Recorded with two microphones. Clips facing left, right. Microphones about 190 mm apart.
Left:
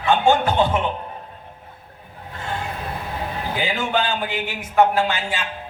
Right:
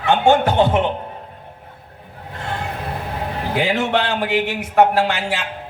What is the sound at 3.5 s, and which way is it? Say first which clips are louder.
A man's voice: right 5 dB; 70° right (ahead or behind).